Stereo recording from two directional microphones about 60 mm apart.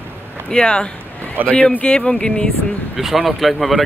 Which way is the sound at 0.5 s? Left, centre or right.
Centre.